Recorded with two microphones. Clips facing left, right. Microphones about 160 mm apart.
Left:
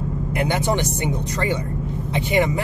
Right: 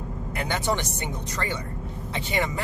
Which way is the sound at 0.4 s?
15° left (ahead or behind).